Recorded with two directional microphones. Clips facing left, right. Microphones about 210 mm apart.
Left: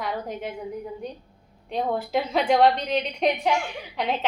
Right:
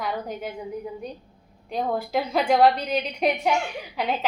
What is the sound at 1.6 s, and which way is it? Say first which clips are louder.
A woman's voice: even; centre (ahead or behind).